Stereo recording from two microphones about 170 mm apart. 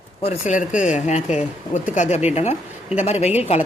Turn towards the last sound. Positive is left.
turn(degrees=40)  # may be behind; listen again after turning